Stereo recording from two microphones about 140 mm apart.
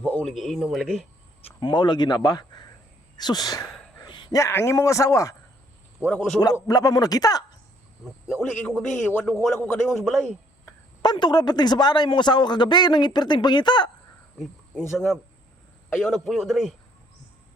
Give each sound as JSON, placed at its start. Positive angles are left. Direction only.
{"t": 0.0, "sound": "a sound", "side_deg": 10}
{"t": 0.3, "sound": "a man's voice", "side_deg": 0}
{"t": 1.6, "sound": "a man's voice", "side_deg": 35}
{"t": 6.1, "sound": "a man's voice", "side_deg": 5}
{"t": 6.4, "sound": "a man's voice", "side_deg": 25}
{"t": 9.0, "sound": "a man's voice", "side_deg": 10}
{"t": 11.0, "sound": "a man's voice", "side_deg": 30}
{"t": 14.8, "sound": "a man's voice", "side_deg": 0}